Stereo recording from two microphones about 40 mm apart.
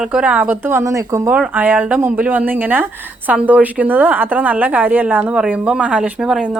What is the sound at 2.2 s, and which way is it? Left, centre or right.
Speech, right.